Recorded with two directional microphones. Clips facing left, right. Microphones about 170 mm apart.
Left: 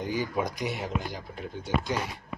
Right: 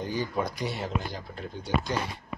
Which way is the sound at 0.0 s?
10° left (ahead or behind).